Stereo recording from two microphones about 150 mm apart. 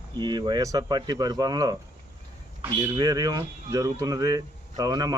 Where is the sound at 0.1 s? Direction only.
30° right (ahead or behind).